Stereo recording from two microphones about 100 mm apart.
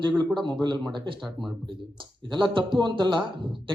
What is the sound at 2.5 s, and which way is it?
Speech, 55° right (ahead or behind).